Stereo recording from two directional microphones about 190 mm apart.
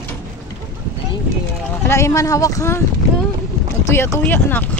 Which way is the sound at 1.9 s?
15° left (ahead or behind).